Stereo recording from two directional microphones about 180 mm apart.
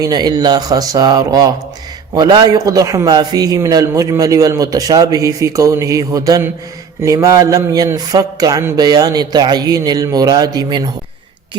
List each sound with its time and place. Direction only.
0.0 s a man's voice: 20° right (ahead or behind)